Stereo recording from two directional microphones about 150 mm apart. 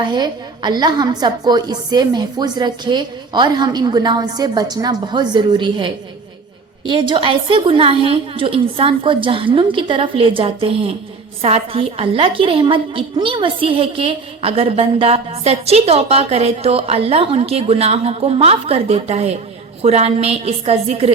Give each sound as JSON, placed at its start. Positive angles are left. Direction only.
{"t": 0.0, "sound": "a woman's voice", "side_deg": -30}